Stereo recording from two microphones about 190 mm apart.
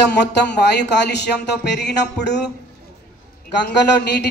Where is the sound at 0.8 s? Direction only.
65° left (ahead or behind).